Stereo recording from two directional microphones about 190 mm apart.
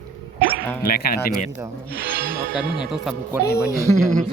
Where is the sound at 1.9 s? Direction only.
55° right (ahead or behind).